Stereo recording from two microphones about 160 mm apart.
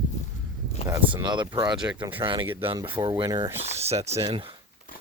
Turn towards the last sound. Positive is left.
turn(degrees=-35)  # may be behind; listen again after turning